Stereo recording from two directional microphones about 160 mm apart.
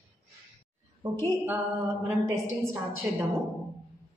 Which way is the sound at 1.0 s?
20° right (ahead or behind).